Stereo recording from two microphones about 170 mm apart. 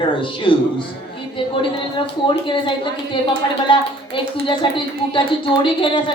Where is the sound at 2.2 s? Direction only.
30° left (ahead or behind).